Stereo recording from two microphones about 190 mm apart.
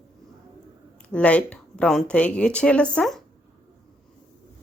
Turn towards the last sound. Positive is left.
turn(degrees=5)  # may be behind; listen again after turning